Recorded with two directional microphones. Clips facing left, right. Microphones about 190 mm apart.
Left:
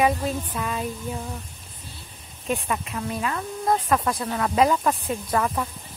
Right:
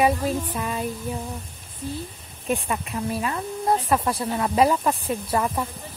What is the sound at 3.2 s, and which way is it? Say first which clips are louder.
Speech: right 1 dB; 30° right (ahead or behind).